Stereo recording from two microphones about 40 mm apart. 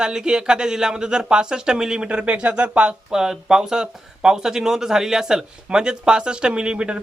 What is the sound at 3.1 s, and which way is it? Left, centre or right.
Speech, centre.